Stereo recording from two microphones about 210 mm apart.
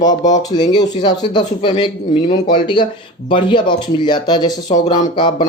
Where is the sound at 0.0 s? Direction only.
20° left (ahead or behind).